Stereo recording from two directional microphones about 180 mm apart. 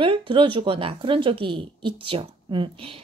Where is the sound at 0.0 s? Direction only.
30° right (ahead or behind).